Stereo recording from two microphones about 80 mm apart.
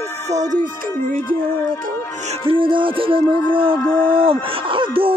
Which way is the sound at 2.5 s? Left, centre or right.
Right.